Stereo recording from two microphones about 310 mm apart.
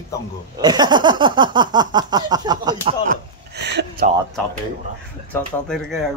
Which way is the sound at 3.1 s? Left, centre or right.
Right.